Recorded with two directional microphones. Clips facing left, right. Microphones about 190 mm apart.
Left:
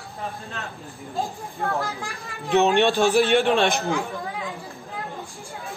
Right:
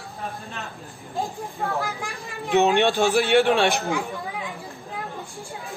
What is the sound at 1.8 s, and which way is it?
Speech, 15° right (ahead or behind).